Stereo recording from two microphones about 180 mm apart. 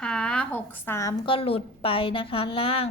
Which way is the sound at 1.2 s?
30° left (ahead or behind).